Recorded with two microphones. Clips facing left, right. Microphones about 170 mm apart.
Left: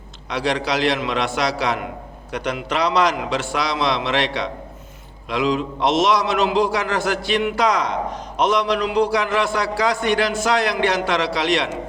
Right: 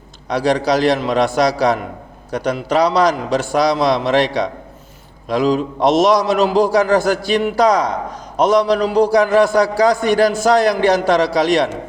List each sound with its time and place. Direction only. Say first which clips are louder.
0.3 s a man's voice: right 6 dB; 40° right (ahead or behind)